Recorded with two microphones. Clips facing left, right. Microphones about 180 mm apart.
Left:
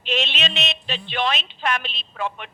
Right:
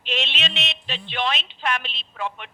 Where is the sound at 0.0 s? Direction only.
40° left (ahead or behind).